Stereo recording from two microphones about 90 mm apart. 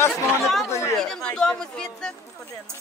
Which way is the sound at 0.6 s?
30° left (ahead or behind).